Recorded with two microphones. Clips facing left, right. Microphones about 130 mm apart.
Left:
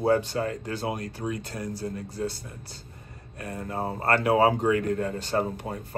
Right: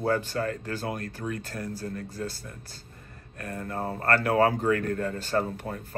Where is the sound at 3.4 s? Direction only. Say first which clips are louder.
Left 1 dB; 20° left (ahead or behind).